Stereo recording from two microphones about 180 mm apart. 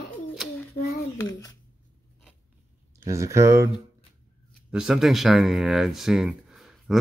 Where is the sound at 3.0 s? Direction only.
15° right (ahead or behind).